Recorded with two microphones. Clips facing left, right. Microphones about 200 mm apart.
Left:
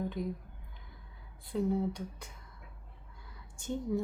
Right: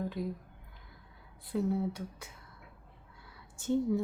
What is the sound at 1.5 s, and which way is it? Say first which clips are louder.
Speech: even; 5° right (ahead or behind).